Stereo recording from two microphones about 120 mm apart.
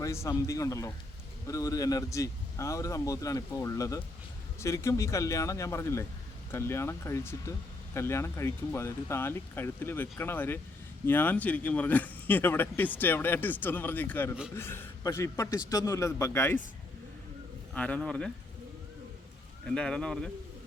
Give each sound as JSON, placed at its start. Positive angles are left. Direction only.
{"t": 0.0, "sound": "speech", "side_deg": 25}
{"t": 17.7, "sound": "speech", "side_deg": 10}
{"t": 19.6, "sound": "speech", "side_deg": 5}